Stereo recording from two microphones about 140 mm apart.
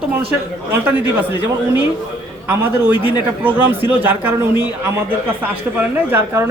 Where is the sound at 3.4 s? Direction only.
10° right (ahead or behind).